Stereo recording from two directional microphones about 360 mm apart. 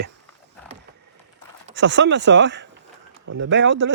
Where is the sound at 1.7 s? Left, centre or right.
Right.